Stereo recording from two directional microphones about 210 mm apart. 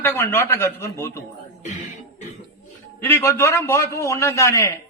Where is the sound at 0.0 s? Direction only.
10° left (ahead or behind).